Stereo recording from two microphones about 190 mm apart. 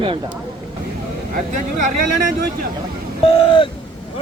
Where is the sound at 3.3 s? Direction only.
25° left (ahead or behind).